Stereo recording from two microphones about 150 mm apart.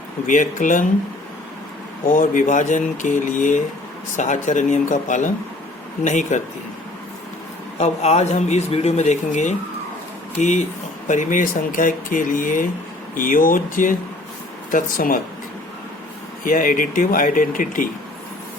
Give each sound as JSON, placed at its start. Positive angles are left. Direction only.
{"t": 0.3, "sound": "speech", "side_deg": 60}
{"t": 2.0, "sound": "speech", "side_deg": 60}
{"t": 7.8, "sound": "speech", "side_deg": 45}
{"t": 16.4, "sound": "speech", "side_deg": 65}